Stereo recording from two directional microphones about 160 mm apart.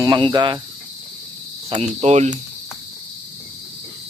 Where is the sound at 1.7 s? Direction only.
40° right (ahead or behind).